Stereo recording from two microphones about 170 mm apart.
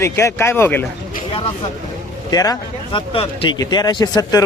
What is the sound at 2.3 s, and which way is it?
Speech, 20° left (ahead or behind).